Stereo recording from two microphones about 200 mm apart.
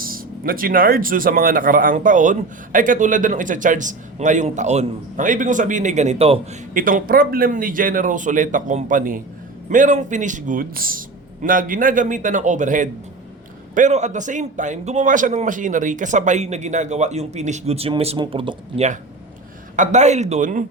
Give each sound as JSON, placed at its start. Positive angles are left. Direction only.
{"t": 0.0, "sound": "speech", "side_deg": -45}
{"t": 6.7, "sound": "a man's voice", "side_deg": -45}